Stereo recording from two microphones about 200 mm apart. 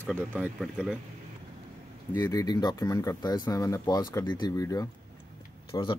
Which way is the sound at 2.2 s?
15° left (ahead or behind).